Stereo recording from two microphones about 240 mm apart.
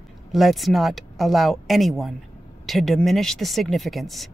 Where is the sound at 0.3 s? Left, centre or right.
Centre.